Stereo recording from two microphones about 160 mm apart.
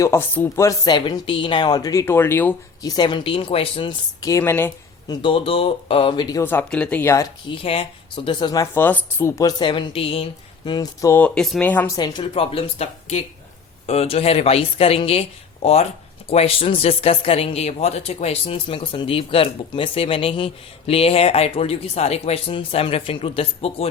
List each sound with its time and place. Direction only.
0.0 s speech: 15° left (ahead or behind)
2.8 s speech: 25° left (ahead or behind)
5.0 s speech: 35° left (ahead or behind)
6.4 s speech: 10° left (ahead or behind)
7.4 s speech: 35° left (ahead or behind)
8.7 s speech: 10° left (ahead or behind); by 10.2 s 35° left (ahead or behind)
10.7 s speech: 25° left (ahead or behind)
11.1 s speech: 5° left (ahead or behind)
11.9 s speech: 25° left (ahead or behind)
12.3 s speech: 35° left (ahead or behind)